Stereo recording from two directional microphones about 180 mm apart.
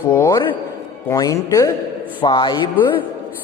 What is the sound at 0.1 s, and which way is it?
A man's voice, 15° left (ahead or behind).